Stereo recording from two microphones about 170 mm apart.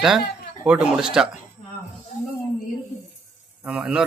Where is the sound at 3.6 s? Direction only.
5° right (ahead or behind).